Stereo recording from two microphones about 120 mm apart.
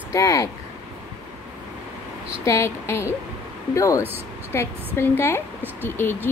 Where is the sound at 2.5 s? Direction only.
25° left (ahead or behind).